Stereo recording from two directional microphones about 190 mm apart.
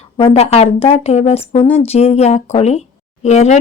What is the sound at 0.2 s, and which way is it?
Speech, 30° left (ahead or behind).